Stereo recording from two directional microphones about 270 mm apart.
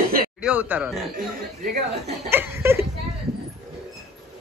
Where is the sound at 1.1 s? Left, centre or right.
Right.